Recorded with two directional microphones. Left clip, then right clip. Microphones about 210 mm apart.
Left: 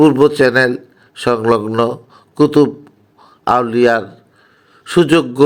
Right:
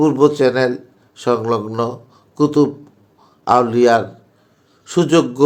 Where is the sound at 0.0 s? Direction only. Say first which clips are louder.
Left 3 dB; 30° left (ahead or behind).